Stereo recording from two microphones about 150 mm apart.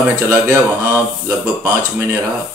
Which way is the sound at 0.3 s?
20° right (ahead or behind).